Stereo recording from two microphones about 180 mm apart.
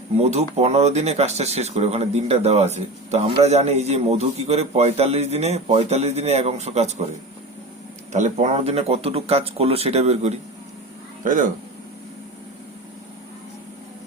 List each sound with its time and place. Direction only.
0.2 s speech: 35° right (ahead or behind)
8.1 s speech: 40° right (ahead or behind)